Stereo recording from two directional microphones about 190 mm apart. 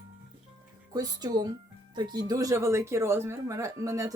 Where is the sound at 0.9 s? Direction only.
20° right (ahead or behind).